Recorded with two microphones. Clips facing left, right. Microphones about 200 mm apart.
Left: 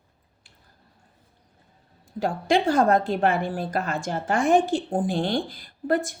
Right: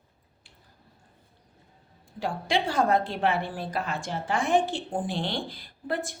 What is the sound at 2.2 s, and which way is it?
A woman's voice, 45° left (ahead or behind).